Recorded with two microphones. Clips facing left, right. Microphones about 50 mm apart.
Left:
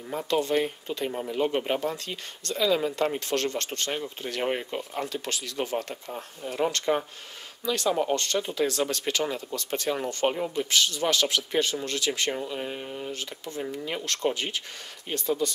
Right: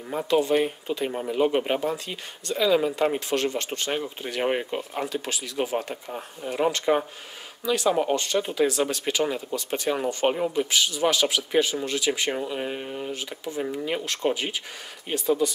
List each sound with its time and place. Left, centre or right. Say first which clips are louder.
0.1 s speech: right 3 dB; centre